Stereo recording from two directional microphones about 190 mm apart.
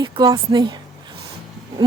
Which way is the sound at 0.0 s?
25° right (ahead or behind).